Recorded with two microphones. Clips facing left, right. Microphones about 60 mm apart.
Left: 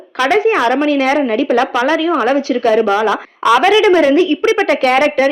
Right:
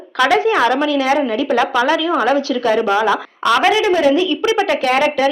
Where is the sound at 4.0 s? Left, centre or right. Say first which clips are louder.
Left 3 dB; left.